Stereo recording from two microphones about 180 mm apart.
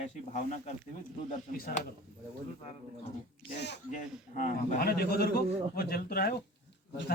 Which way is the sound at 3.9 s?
45° left (ahead or behind).